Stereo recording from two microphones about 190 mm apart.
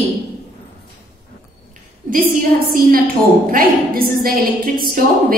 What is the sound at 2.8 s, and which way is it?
A woman's voice, 50° right (ahead or behind).